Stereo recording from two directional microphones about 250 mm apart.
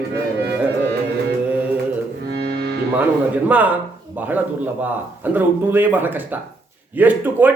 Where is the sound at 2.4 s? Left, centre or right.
Right.